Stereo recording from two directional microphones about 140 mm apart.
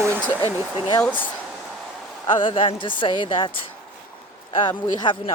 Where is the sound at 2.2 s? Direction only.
35° left (ahead or behind).